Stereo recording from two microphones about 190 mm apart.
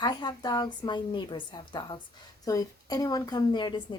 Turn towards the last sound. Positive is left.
turn(degrees=25)  # may be behind; listen again after turning